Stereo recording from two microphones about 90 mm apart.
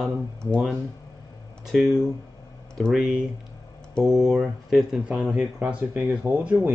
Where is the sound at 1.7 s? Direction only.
Centre (ahead or behind); by 6.5 s 20° right (ahead or behind).